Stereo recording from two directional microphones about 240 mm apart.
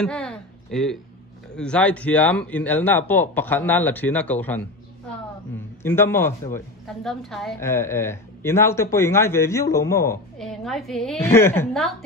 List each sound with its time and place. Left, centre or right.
0.0 s a sound: centre
1.5 s a woman's voice: centre
5.8 s a woman's voice: centre
10.4 s a woman's voice: centre